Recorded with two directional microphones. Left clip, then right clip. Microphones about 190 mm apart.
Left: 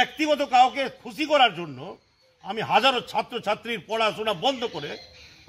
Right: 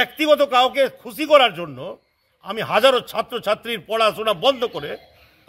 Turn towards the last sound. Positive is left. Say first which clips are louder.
# right 6 dB
turn(degrees=-15)  # may be behind; listen again after turning